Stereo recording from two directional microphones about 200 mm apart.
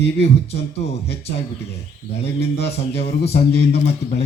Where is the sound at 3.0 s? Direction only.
55° left (ahead or behind).